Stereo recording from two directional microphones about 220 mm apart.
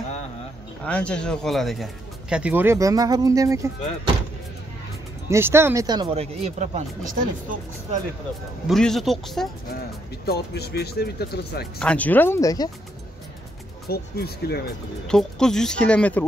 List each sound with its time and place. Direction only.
0.8 s speech: 5° left (ahead or behind); by 4.1 s 15° right (ahead or behind)
5.3 s speech: 10° right (ahead or behind); by 6.8 s 30° right (ahead or behind)
8.6 s speech: centre (ahead or behind)
10.2 s speech: 45° left (ahead or behind)
11.8 s speech: 5° left (ahead or behind)
13.8 s speech: 45° left (ahead or behind)
15.0 s speech: 5° left (ahead or behind)